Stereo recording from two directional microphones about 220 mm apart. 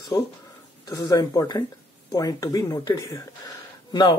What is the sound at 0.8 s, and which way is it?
Speech, 15° left (ahead or behind).